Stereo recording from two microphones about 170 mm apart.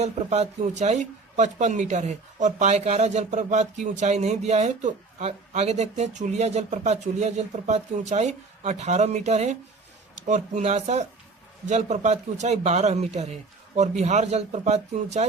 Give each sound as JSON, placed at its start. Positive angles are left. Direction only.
{"t": 0.0, "sound": "a man's voice", "side_deg": -40}